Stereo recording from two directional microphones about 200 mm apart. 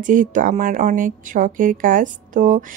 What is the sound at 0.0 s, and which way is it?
Speech, 40° right (ahead or behind).